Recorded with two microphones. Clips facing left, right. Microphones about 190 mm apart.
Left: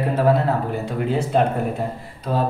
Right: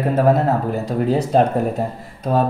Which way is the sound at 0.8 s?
40° right (ahead or behind).